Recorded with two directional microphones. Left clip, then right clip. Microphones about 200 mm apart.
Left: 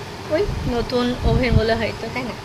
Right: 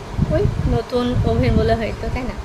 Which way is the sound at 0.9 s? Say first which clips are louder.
Right 1 dB; centre (ahead or behind).